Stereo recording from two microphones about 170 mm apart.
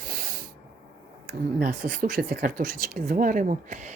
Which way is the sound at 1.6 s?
55° right (ahead or behind).